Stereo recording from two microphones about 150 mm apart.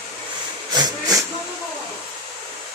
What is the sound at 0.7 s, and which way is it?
Hiss, 30° right (ahead or behind).